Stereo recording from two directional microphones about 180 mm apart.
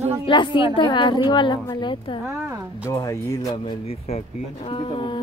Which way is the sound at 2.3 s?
15° right (ahead or behind).